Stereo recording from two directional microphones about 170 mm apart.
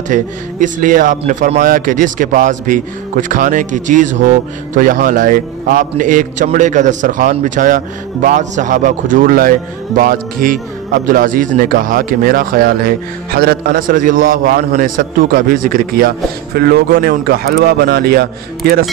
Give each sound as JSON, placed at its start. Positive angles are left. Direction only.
{"t": 0.1, "sound": "speech", "side_deg": -50}